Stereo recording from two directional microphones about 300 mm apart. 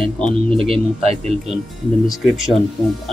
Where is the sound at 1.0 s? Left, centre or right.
Centre.